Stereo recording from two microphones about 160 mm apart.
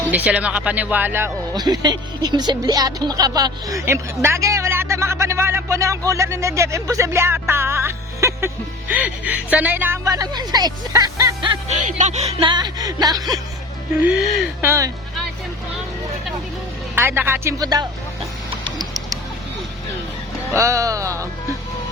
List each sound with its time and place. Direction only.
0.1 s speech: 10° right (ahead or behind)
1.5 s speech: 25° right (ahead or behind)
11.7 s speech: 50° right (ahead or behind)
12.4 s speech: 30° right (ahead or behind)
14.0 s speech: 10° right (ahead or behind)
16.9 s speech: 15° right (ahead or behind)
18.6 s pigeon: 25° right (ahead or behind)
20.5 s speech: 20° right (ahead or behind)